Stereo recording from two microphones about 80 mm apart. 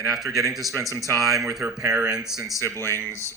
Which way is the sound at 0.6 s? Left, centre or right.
Right.